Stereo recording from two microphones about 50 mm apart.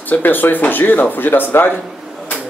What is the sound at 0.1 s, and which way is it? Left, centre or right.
Speech, left.